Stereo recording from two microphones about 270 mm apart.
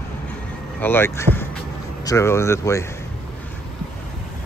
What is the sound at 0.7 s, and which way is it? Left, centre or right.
Speech, centre.